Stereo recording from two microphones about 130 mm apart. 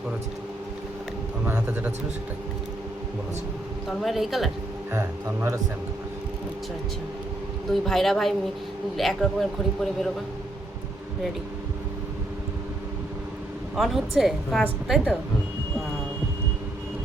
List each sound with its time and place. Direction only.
1.5 s a man's voice: 15° right (ahead or behind)
3.8 s a woman's voice: centre (ahead or behind)
4.9 s speech: 20° right (ahead or behind)
7.7 s a woman's voice: centre (ahead or behind)
13.7 s a woman's voice: centre (ahead or behind)